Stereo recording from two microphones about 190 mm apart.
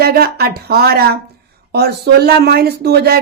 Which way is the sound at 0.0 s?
55° right (ahead or behind).